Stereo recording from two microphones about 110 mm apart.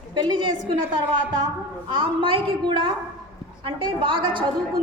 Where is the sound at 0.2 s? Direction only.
40° right (ahead or behind).